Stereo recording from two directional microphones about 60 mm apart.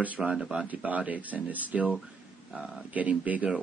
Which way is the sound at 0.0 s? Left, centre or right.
Right.